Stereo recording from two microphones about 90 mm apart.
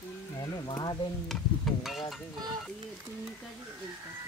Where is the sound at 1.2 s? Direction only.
5° left (ahead or behind).